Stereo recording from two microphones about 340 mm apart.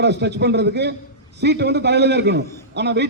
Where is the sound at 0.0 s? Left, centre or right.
Right.